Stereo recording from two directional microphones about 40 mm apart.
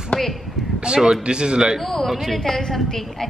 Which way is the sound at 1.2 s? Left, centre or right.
Right.